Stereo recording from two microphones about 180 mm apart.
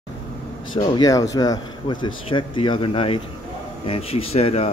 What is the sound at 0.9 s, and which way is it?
Speech, 20° left (ahead or behind).